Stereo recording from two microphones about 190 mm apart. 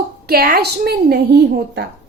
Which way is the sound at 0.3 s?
55° right (ahead or behind).